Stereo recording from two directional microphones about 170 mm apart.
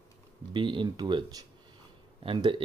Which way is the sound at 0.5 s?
30° right (ahead or behind).